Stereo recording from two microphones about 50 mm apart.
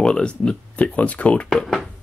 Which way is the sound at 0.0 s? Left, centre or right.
Centre.